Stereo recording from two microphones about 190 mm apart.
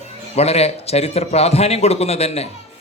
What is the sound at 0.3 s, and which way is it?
A man's voice, 35° left (ahead or behind).